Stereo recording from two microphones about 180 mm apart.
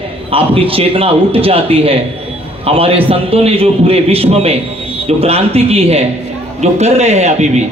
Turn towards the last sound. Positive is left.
turn(degrees=-40)  # may be behind; listen again after turning